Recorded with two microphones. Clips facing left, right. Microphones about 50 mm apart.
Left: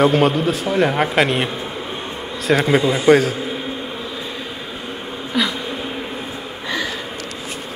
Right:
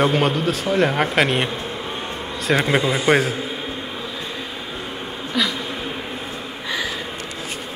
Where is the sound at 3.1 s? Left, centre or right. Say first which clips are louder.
Left 5 dB; centre.